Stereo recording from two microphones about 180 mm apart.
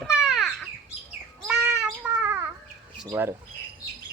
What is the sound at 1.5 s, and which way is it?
Cat, 5° right (ahead or behind).